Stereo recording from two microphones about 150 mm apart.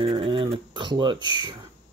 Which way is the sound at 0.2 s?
35° right (ahead or behind).